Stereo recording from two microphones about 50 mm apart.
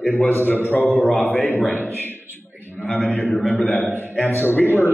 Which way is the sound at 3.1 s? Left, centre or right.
Left.